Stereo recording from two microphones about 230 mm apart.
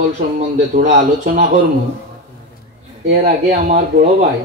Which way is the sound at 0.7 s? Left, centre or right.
Right.